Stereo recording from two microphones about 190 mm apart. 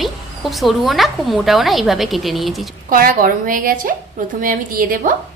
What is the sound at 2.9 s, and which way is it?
Speech, 50° right (ahead or behind).